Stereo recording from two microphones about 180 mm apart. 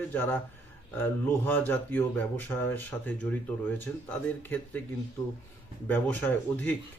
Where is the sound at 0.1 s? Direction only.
10° left (ahead or behind).